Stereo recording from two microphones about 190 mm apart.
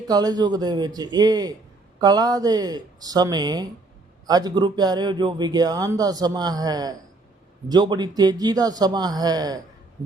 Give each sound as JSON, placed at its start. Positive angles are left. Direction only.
{"t": 0.1, "sound": "speech", "side_deg": -20}